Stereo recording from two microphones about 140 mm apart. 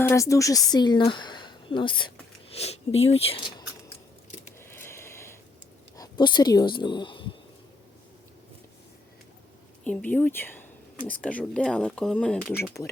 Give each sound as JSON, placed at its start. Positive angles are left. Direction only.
{"t": 0.0, "sound": "speech", "side_deg": 20}
{"t": 2.5, "sound": "speech", "side_deg": 45}
{"t": 4.6, "sound": "a sound", "side_deg": 15}
{"t": 6.0, "sound": "speech", "side_deg": 30}
{"t": 9.8, "sound": "speech", "side_deg": 10}